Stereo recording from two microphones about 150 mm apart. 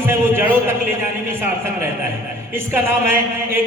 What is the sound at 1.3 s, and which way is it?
A man's voice, 15° right (ahead or behind).